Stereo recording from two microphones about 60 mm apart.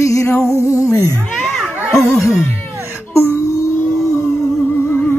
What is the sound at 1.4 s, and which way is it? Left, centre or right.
Children playing, centre.